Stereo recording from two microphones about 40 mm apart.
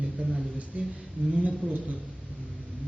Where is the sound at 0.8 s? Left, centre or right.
Right.